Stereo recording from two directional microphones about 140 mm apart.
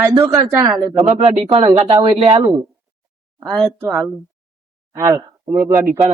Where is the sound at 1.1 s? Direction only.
40° right (ahead or behind).